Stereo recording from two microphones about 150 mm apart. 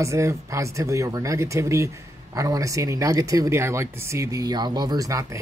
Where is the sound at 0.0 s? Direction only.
20° right (ahead or behind).